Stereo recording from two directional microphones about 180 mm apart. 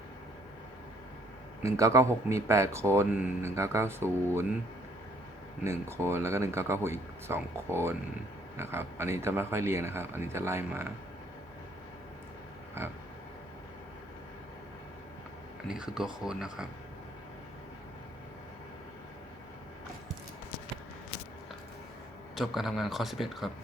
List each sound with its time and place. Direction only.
1.6 s speech: 15° right (ahead or behind)
5.6 s speech: 15° right (ahead or behind)
12.8 s speech: 15° right (ahead or behind)
15.6 s a man's voice: 5° right (ahead or behind)
22.4 s a man's voice: centre (ahead or behind)